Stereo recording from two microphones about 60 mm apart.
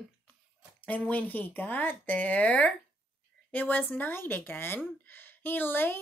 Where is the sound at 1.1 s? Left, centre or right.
Left.